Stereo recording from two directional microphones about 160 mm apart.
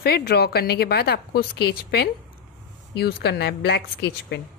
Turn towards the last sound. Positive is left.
turn(degrees=90)